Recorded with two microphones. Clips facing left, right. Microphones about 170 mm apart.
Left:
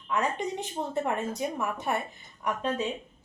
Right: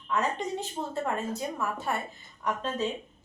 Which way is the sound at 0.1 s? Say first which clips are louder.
Even; 15° left (ahead or behind).